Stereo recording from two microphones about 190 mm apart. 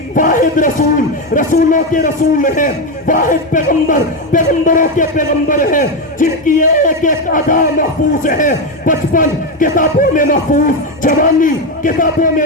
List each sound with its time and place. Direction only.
0.1 s speech: 45° left (ahead or behind)